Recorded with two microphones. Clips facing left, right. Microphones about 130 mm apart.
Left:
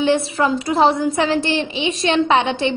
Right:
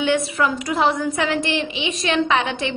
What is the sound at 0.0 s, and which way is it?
A woman's voice, 30° left (ahead or behind).